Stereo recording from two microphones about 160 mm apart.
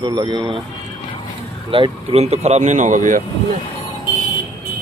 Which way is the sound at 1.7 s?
35° right (ahead or behind).